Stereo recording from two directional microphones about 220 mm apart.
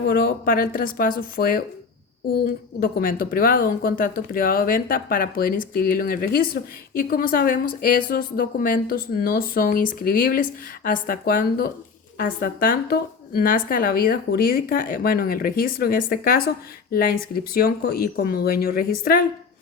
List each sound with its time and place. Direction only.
0.0 s speech: 40° left (ahead or behind)